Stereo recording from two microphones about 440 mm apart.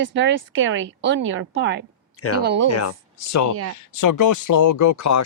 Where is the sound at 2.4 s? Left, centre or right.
Right.